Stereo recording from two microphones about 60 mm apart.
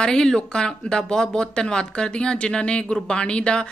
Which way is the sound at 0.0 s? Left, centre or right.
Centre.